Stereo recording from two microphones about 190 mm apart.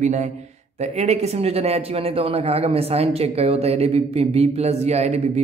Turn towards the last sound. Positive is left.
turn(degrees=-35)  # may be behind; listen again after turning